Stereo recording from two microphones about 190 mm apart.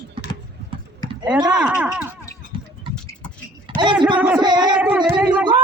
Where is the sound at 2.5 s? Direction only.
25° right (ahead or behind).